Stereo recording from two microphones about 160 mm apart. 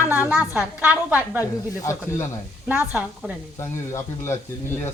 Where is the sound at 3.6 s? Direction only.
15° left (ahead or behind).